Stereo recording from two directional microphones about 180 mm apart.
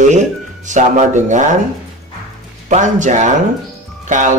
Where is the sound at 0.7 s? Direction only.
45° right (ahead or behind).